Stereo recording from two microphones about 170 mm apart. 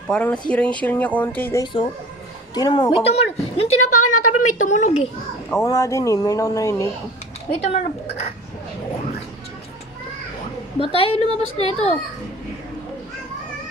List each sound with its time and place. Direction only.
0.1 s speech: 10° left (ahead or behind)
1.6 s a woman's voice: 30° left (ahead or behind); by 5.0 s 45° left (ahead or behind)
5.6 s speech: 15° left (ahead or behind)
7.5 s a woman's voice: 40° left (ahead or behind)
11.0 s a woman's voice: 35° left (ahead or behind)